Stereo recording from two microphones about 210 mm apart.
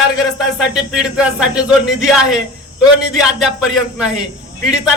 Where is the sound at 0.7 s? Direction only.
5° right (ahead or behind).